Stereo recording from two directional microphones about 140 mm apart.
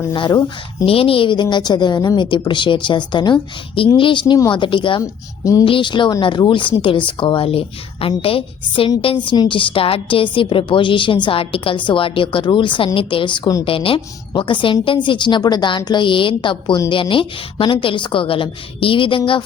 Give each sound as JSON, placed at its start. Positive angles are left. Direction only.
{"t": 0.1, "sound": "speech", "side_deg": 30}
{"t": 0.9, "sound": "a woman's voice", "side_deg": 40}